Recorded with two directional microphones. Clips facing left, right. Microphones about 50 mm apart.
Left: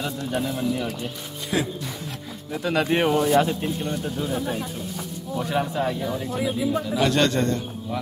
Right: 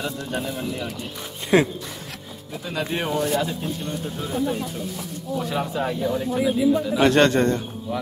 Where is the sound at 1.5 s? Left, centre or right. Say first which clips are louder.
Right 7 dB; right.